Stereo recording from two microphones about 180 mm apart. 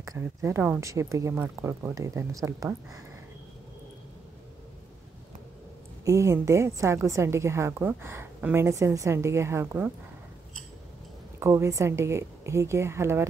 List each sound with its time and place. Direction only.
0.0 s a woman's voice: 15° right (ahead or behind)
6.0 s a woman's voice: 15° right (ahead or behind)
11.3 s a woman's voice: 15° right (ahead or behind)